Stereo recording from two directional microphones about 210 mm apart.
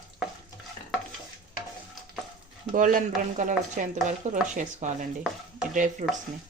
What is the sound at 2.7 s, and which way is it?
Speech, 40° right (ahead or behind).